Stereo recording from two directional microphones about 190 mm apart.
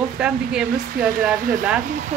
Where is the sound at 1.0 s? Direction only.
50° right (ahead or behind).